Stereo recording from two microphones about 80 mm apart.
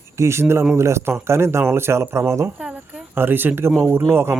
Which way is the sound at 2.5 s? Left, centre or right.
Centre.